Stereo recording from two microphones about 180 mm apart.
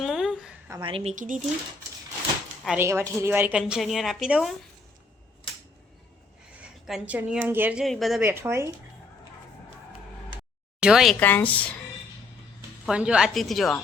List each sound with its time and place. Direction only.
0.0 s a sound: centre (ahead or behind)
0.8 s a woman's voice: 30° right (ahead or behind)
1.1 s speech: 45° right (ahead or behind)
2.6 s a woman's voice: 15° right (ahead or behind)
6.6 s a woman's voice: 5° right (ahead or behind)
8.2 s speech: 10° right (ahead or behind)
10.8 s speech: 5° right (ahead or behind)
11.2 s speech: 10° left (ahead or behind)
12.8 s a woman's voice: 5° right (ahead or behind)